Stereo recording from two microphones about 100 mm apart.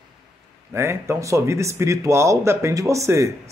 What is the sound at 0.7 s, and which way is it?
Speech, 25° right (ahead or behind).